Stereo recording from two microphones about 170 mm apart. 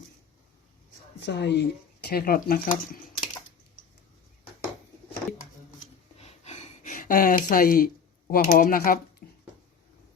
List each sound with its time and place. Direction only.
1.2 s speech: 85° left; by 3.0 s 60° left (ahead or behind)
5.8 s a sound: 40° left (ahead or behind); by 7.9 s 60° left (ahead or behind)
8.3 s speech: 55° left (ahead or behind)